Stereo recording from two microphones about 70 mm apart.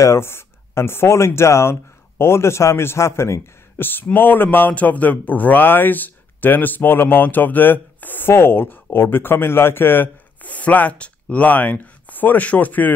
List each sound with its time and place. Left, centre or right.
0.0 s speech: left
3.8 s speech: left